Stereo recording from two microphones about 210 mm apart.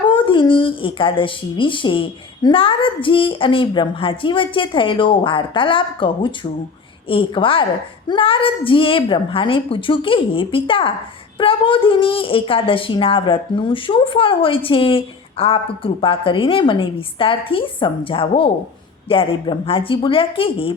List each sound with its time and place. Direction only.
0.1 s a woman's voice: 25° left (ahead or behind)